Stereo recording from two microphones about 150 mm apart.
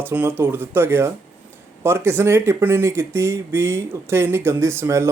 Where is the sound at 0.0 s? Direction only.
10° right (ahead or behind).